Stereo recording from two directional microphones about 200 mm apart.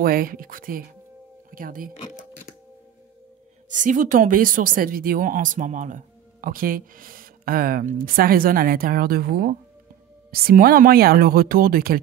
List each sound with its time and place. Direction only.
0.0 s speech: 45° right (ahead or behind)
3.6 s speech: 40° right (ahead or behind)